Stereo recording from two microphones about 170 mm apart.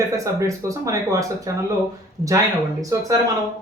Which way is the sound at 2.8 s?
20° right (ahead or behind).